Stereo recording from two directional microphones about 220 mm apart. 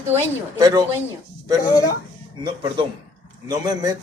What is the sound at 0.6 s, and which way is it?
Speech, 15° right (ahead or behind).